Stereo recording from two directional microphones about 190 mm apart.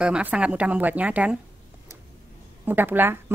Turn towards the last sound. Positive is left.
turn(degrees=-10)  # may be behind; listen again after turning